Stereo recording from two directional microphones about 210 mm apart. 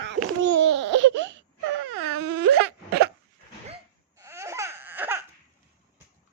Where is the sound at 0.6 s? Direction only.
60° right (ahead or behind).